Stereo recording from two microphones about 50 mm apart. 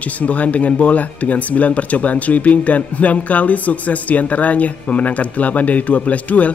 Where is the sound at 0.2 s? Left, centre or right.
Left.